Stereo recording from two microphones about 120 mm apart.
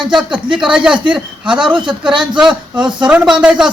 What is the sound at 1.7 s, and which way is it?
Speech, 40° right (ahead or behind).